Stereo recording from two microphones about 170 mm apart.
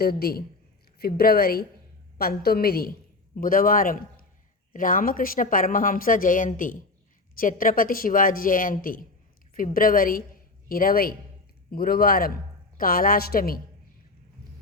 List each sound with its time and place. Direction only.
0.0 s a woman's voice: 65° left (ahead or behind)